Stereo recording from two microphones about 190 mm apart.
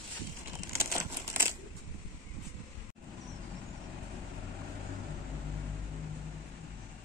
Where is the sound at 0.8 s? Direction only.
15° right (ahead or behind).